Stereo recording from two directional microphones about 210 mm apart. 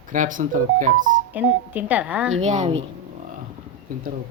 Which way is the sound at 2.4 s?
35° right (ahead or behind).